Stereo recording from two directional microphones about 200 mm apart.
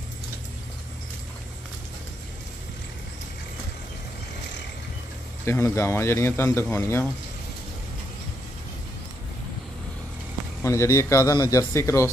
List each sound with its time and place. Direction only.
5.4 s a man's voice: 15° left (ahead or behind)
10.6 s a man's voice: 15° left (ahead or behind)